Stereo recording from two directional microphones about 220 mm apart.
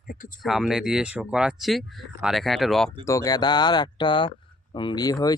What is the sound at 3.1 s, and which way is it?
A man's voice, 15° left (ahead or behind).